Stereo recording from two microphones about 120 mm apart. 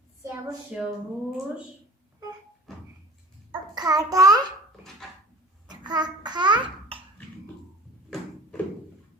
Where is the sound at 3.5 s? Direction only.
35° right (ahead or behind).